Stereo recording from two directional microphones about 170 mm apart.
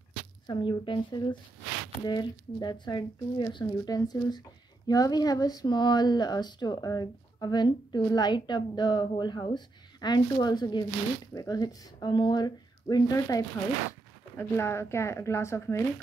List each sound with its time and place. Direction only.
0.5 s speech: 30° left (ahead or behind)